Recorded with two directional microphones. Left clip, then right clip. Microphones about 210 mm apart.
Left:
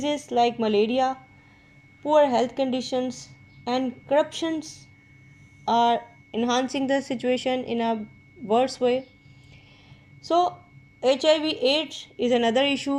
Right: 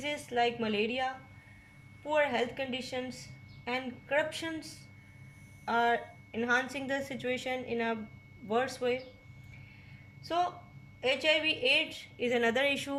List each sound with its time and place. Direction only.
0.0 s a woman's voice: 25° left (ahead or behind)
5.6 s a woman's voice: 25° left (ahead or behind)
10.2 s a woman's voice: 30° left (ahead or behind)